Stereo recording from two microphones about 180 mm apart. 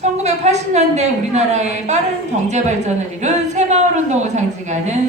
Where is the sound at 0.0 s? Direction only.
40° right (ahead or behind).